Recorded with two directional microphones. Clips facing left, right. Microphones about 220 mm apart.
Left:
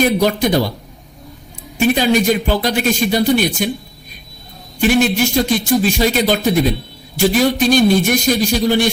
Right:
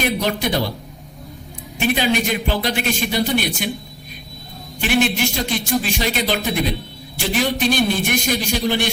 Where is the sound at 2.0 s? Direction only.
40° left (ahead or behind).